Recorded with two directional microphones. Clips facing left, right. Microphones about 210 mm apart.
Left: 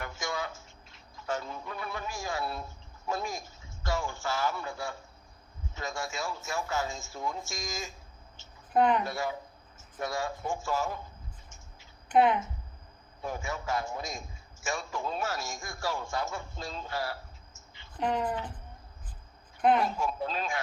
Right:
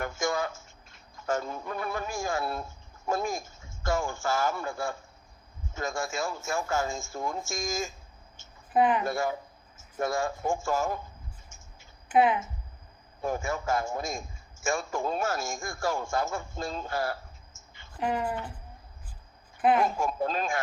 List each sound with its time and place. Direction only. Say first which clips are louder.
0.0 s a man's voice: right 6 dB; 45° right (ahead or behind)
8.4 s a sound: even; 45° right (ahead or behind)
8.7 s speech: right 1 dB; 5° right (ahead or behind)
9.0 s a man's voice: right 4 dB; 50° right (ahead or behind)
12.0 s speech: right 1 dB; 5° right (ahead or behind)
13.2 s a man's voice: right 5 dB; 45° right (ahead or behind)
17.5 s a sound: even; 45° right (ahead or behind)
17.9 s speech: even; 5° right (ahead or behind)
19.5 s speech: right 1 dB; 5° right (ahead or behind)
19.8 s a man's voice: right 3 dB; 45° right (ahead or behind)